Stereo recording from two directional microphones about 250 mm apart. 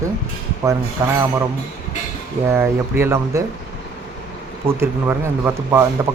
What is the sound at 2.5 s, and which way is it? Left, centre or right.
Speech, centre.